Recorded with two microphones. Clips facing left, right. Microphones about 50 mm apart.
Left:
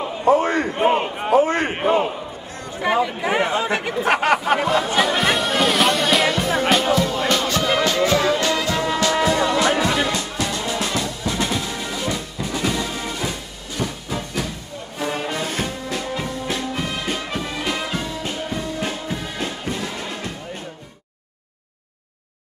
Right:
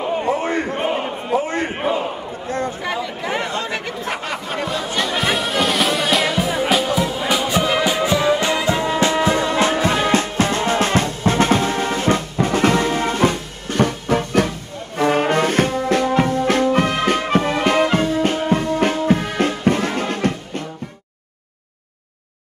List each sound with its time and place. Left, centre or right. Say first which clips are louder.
0.3 s a man's voice: left 8 dB; left
0.8 s a sound: left 3 dB; left
1.3 s a man's voice: left 4 dB; left
2.8 s speech: left 4 dB; centre
4.1 s a sound: left 10 dB; left
4.8 s music: left 2 dB; centre; by 20.6 s right